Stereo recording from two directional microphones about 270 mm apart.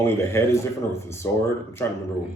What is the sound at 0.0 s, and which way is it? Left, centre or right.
A man's voice, centre.